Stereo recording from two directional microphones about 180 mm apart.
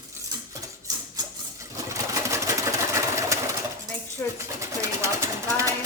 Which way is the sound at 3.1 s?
15° right (ahead or behind).